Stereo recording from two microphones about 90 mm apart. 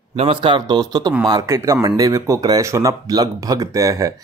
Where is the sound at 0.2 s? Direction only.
80° right.